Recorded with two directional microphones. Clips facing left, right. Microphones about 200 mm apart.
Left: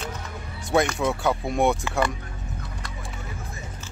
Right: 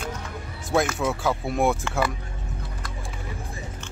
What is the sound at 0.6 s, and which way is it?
Speech, centre (ahead or behind).